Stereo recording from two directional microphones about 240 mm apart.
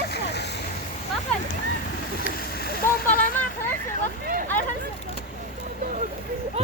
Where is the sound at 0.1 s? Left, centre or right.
Left.